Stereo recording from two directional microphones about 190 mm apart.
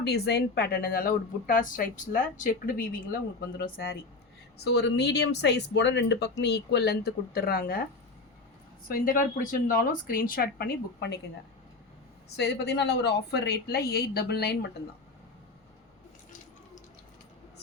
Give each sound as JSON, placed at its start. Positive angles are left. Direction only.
{"t": 0.0, "sound": "speech", "side_deg": 60}
{"t": 8.9, "sound": "speech", "side_deg": 45}
{"t": 12.4, "sound": "speech", "side_deg": 60}